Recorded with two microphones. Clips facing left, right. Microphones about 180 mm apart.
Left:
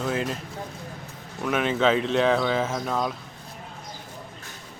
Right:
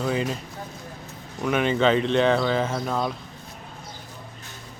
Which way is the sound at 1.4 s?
Centre (ahead or behind).